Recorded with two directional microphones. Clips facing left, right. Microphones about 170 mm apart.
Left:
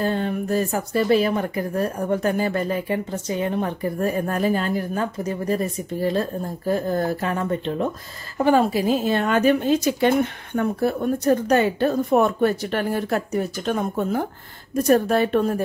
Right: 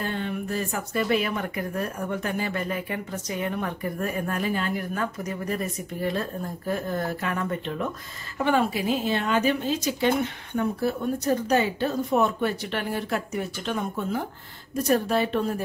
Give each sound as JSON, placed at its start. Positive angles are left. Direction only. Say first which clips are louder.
{"t": 0.0, "sound": "a woman's voice", "louder": "left 6 dB", "side_deg": 40}